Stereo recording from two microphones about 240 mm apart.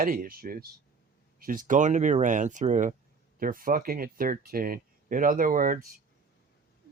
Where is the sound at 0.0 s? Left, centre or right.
Right.